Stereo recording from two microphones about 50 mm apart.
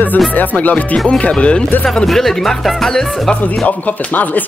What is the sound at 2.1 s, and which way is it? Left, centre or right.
Music, centre.